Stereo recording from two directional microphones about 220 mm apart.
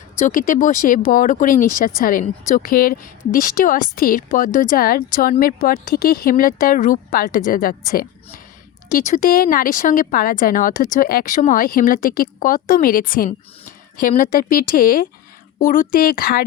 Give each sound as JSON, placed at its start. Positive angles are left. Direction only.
{"t": 0.2, "sound": "a woman's voice", "side_deg": 35}